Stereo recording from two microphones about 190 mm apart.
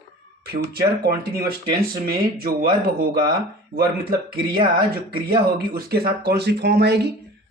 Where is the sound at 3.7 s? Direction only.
55° right (ahead or behind).